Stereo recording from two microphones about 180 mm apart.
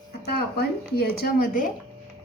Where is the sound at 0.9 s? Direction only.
55° left (ahead or behind).